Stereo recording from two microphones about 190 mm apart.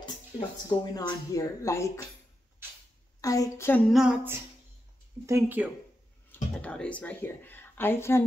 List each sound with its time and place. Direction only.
0.7 s speech: 20° left (ahead or behind)
3.2 s speech: 15° left (ahead or behind)
3.9 s a sound: 5° right (ahead or behind)
5.2 s speech: 10° right (ahead or behind)
6.3 s speech: 5° left (ahead or behind)